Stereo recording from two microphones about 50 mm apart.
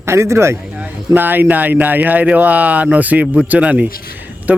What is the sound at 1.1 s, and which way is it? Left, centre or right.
Speech, right.